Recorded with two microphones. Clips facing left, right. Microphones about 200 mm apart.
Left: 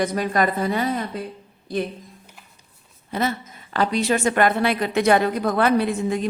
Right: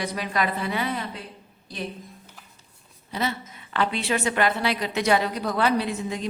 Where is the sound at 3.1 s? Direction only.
50° left (ahead or behind).